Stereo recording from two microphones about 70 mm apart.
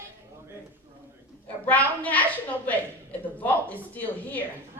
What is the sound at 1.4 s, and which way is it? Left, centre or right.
Speech, left.